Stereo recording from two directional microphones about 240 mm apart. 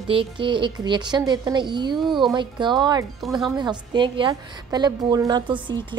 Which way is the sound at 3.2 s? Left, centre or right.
Centre.